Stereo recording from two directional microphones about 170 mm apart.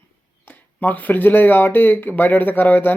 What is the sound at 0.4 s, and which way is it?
Speech, 10° left (ahead or behind).